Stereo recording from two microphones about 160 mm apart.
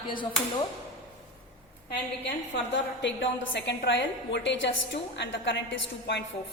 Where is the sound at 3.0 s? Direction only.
90° left.